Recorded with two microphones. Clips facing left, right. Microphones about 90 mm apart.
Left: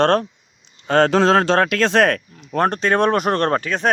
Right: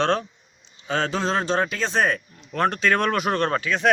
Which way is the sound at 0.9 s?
65° left (ahead or behind).